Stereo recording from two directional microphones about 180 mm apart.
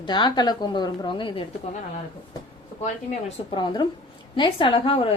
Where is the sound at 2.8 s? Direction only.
40° left (ahead or behind).